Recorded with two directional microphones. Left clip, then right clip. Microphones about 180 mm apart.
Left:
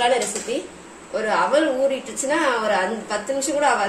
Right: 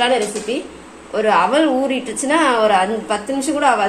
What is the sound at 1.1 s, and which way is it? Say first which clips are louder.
Speech: right 5 dB; 35° right (ahead or behind).